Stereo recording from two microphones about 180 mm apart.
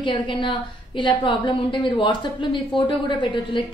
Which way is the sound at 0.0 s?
25° left (ahead or behind).